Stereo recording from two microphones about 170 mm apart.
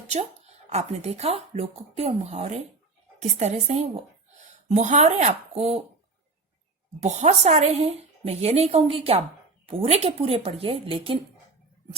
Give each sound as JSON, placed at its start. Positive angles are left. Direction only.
{"t": 0.1, "sound": "a woman's voice", "side_deg": -40}
{"t": 7.0, "sound": "speech", "side_deg": -40}